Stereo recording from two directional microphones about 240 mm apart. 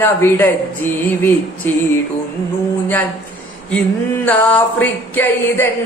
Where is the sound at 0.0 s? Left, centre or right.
Centre.